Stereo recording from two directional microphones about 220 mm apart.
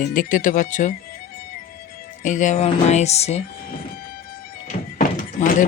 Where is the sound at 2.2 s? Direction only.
35° left (ahead or behind).